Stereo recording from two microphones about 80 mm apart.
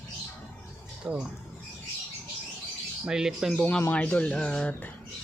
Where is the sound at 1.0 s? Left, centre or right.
Centre.